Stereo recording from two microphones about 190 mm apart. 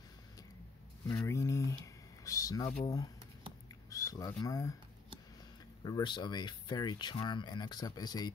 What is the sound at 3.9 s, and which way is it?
Speech, 15° left (ahead or behind).